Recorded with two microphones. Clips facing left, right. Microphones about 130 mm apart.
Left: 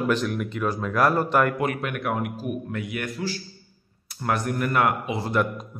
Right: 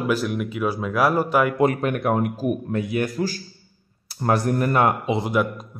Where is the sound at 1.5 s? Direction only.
35° right (ahead or behind).